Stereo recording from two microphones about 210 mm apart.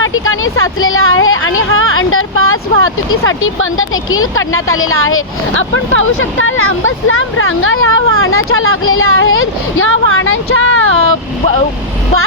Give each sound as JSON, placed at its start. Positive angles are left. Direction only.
{"t": 0.0, "sound": "speech", "side_deg": 75}